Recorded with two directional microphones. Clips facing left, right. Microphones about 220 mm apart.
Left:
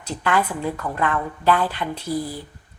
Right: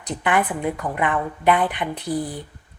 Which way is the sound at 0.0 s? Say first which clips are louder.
Right 1 dB; 20° right (ahead or behind).